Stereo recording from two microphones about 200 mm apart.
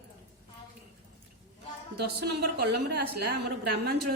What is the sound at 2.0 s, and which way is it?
A woman's voice, 55° right (ahead or behind).